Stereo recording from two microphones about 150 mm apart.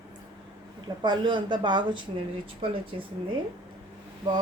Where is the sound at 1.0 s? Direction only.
30° right (ahead or behind).